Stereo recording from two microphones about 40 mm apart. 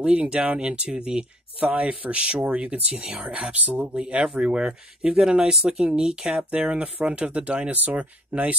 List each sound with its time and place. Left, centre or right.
0.0 s speech: right
3.5 s speech: right
3.8 s speech: right
6.3 s speech: right